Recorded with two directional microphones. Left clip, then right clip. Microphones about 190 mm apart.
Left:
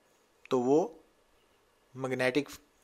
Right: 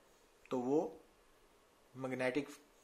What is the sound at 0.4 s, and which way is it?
Speech, 45° left (ahead or behind).